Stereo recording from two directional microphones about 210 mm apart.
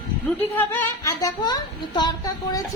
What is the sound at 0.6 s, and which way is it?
A woman's voice, 10° left (ahead or behind).